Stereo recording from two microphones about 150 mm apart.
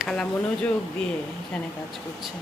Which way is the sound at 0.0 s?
5° left (ahead or behind).